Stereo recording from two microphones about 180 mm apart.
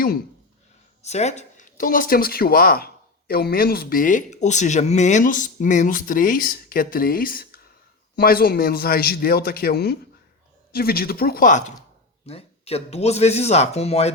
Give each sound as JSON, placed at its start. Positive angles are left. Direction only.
{"t": 1.0, "sound": "a man's voice", "side_deg": 40}
{"t": 12.2, "sound": "speech", "side_deg": 35}